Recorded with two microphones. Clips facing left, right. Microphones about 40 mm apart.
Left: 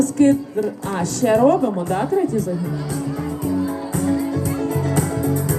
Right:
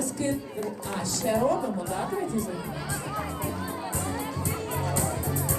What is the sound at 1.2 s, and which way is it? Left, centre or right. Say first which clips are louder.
Speech: left 10 dB; left.